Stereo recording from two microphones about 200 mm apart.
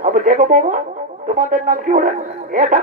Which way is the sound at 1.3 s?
40° right (ahead or behind).